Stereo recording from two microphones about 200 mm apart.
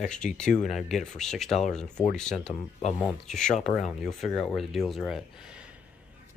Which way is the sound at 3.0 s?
Centre (ahead or behind).